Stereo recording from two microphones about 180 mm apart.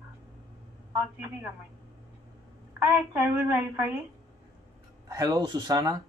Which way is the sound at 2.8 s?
10° right (ahead or behind).